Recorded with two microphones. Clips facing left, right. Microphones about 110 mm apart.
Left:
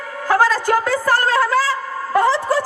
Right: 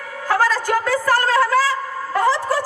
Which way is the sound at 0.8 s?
20° left (ahead or behind).